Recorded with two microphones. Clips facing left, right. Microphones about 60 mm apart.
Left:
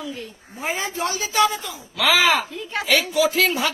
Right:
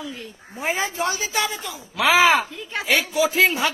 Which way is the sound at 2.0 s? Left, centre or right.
Right.